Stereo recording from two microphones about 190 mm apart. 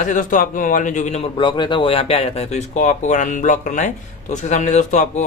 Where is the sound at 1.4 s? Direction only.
25° left (ahead or behind).